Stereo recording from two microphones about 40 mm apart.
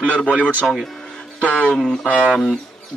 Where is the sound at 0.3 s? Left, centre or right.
Right.